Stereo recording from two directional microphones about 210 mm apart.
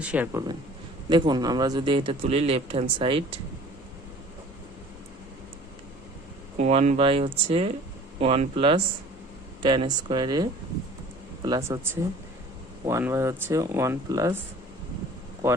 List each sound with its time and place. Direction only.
0.0 s speech: 5° right (ahead or behind)
1.1 s speech: 20° right (ahead or behind)
6.6 s speech: 30° right (ahead or behind); by 14.3 s 15° right (ahead or behind)
15.4 s speech: 15° right (ahead or behind)